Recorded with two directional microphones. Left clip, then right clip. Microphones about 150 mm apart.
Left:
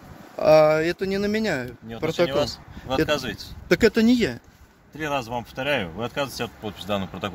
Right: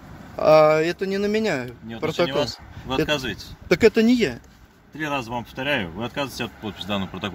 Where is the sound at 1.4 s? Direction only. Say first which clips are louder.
Right 2 dB; 20° left (ahead or behind).